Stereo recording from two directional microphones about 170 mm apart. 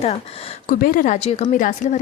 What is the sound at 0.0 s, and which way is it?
Speech, 40° left (ahead or behind).